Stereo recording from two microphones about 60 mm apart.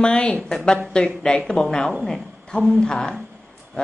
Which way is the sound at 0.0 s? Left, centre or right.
Centre.